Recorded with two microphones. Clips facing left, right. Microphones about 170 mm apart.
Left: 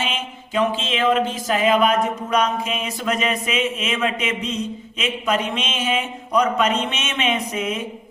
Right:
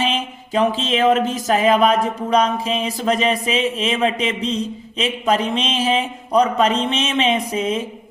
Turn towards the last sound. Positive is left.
turn(degrees=-30)  # may be behind; listen again after turning